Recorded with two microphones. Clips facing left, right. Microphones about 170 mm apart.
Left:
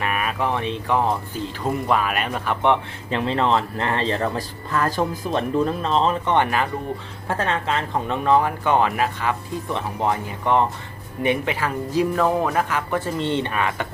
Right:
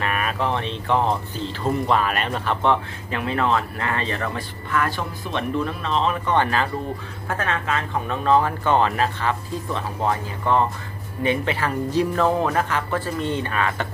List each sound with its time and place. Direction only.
0.0 s speech: 10° left (ahead or behind); by 6.1 s 35° left (ahead or behind)
6.2 s speech: 20° left (ahead or behind)
7.3 s speech: 30° left (ahead or behind); by 13.0 s 10° left (ahead or behind)
13.1 s speech: 25° left (ahead or behind)